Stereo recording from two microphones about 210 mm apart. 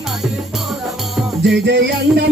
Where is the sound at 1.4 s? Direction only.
55° right (ahead or behind).